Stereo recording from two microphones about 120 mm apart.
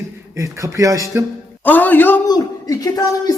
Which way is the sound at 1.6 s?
15° left (ahead or behind).